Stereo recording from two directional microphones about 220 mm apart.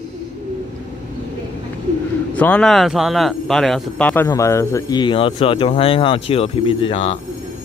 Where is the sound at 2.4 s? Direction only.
5° left (ahead or behind); by 7.2 s 30° left (ahead or behind).